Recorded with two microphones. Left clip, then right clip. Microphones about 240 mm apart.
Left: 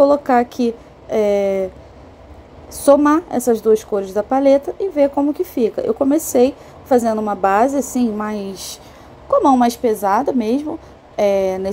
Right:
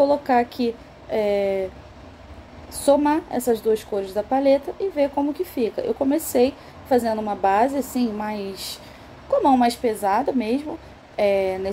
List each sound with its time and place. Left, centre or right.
0.3 s a woman's voice: left
2.8 s a woman's voice: left